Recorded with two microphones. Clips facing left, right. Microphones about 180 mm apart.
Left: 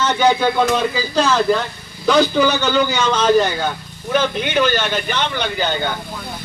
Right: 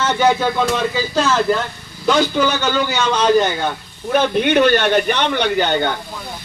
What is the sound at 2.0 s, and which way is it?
Speech, centre (ahead or behind).